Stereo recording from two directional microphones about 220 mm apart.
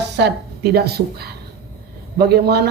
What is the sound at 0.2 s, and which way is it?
A man's voice, 45° right (ahead or behind).